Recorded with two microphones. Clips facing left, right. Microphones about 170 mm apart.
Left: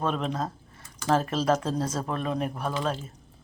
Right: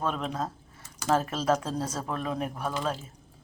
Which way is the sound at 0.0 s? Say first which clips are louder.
Left 2 dB; 5° right (ahead or behind).